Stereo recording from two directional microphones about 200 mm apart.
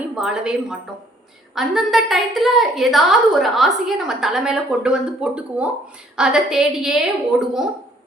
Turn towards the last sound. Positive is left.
turn(degrees=0)  # may be behind; listen again after turning